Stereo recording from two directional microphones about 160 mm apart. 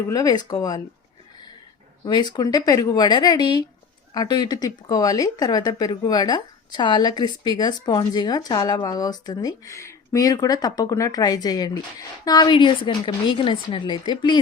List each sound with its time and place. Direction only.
0.1 s speech: 25° left (ahead or behind)
2.0 s speech: 25° left (ahead or behind)